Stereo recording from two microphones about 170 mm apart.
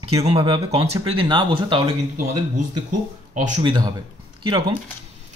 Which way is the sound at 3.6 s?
25° right (ahead or behind).